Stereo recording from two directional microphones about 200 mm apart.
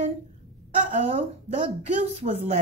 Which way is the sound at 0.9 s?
40° right (ahead or behind).